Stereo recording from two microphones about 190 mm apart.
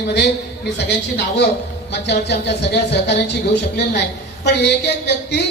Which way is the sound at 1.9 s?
60° left (ahead or behind).